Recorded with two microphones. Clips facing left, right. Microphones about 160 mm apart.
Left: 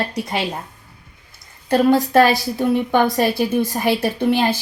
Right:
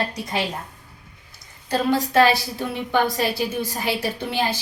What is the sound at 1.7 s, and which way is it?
A woman's voice, 50° left (ahead or behind).